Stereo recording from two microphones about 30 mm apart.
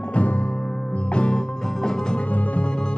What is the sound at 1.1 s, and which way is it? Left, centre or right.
Music, left.